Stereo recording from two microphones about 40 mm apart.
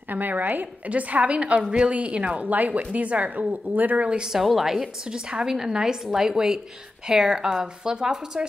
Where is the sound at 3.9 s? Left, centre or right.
Right.